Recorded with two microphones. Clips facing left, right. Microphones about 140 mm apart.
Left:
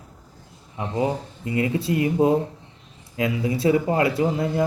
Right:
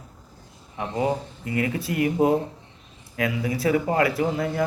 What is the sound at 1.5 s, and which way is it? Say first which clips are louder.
Speech: left 3 dB; 25° left (ahead or behind).